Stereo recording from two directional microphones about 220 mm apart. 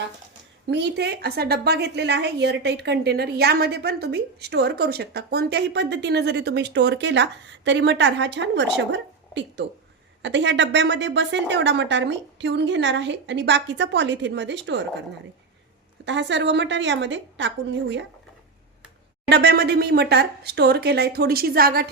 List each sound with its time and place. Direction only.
0.7 s a woman's voice: 50° right (ahead or behind)
16.0 s a woman's voice: 55° right (ahead or behind)
19.3 s a woman's voice: 45° right (ahead or behind)